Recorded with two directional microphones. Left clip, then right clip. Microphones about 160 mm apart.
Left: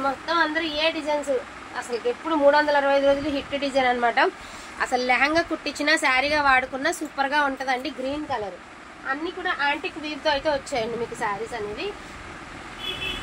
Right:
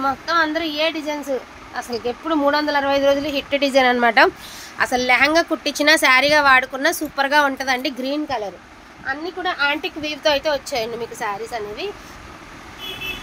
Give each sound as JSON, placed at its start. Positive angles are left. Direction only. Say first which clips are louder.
{"t": 0.3, "sound": "a woman's voice", "louder": "right 3 dB", "side_deg": -75}
{"t": 4.7, "sound": "a woman's voice", "louder": "right 5 dB", "side_deg": -55}
{"t": 9.4, "sound": "speech", "louder": "right 5 dB", "side_deg": -90}